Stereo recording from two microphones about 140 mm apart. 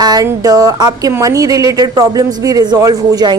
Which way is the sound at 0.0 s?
30° right (ahead or behind).